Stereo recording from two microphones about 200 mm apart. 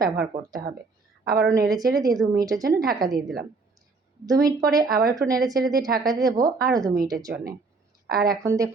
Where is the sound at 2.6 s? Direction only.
50° right (ahead or behind).